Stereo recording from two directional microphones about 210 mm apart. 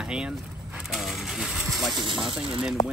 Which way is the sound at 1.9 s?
20° right (ahead or behind).